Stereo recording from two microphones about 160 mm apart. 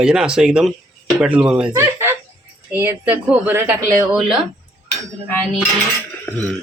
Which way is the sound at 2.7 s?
10° right (ahead or behind).